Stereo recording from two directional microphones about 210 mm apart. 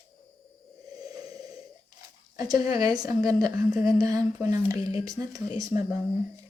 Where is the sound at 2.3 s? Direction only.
20° right (ahead or behind).